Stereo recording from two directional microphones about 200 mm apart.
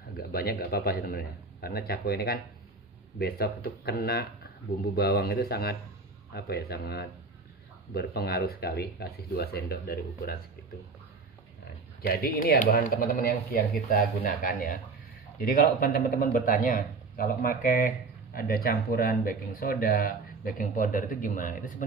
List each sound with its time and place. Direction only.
0.3 s speech: 50° left (ahead or behind)
12.0 s speech: 50° left (ahead or behind)
15.8 s speech: 45° left (ahead or behind)